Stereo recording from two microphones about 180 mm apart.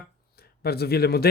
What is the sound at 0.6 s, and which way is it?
Speech, 60° left (ahead or behind).